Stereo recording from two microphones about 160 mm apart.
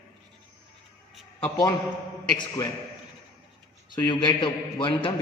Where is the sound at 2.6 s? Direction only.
20° left (ahead or behind).